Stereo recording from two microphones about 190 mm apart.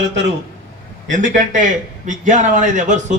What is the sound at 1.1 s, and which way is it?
A man's voice, 40° right (ahead or behind).